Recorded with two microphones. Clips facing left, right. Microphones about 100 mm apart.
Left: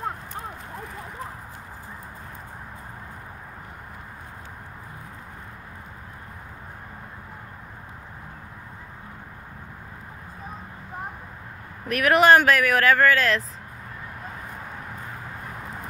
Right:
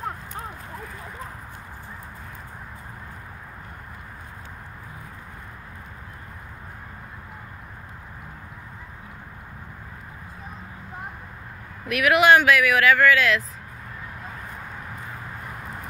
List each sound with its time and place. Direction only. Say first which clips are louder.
11.9 s speech: even; 40° left (ahead or behind)